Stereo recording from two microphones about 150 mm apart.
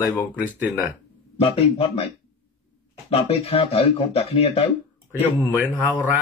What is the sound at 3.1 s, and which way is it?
Speech, 40° left (ahead or behind).